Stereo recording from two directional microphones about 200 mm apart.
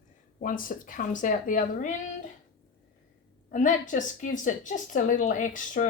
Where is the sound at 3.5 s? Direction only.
40° left (ahead or behind).